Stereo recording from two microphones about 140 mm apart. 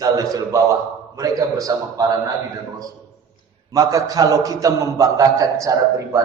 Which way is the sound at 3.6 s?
25° right (ahead or behind).